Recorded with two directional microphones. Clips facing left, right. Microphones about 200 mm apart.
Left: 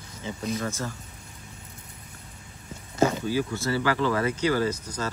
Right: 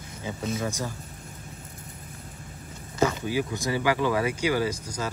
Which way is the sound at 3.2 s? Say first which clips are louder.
Left 1 dB; 15° right (ahead or behind).